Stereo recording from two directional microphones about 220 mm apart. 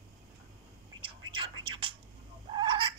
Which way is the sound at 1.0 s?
20° right (ahead or behind).